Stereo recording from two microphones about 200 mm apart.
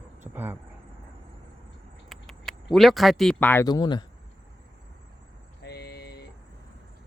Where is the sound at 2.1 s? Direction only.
Centre (ahead or behind).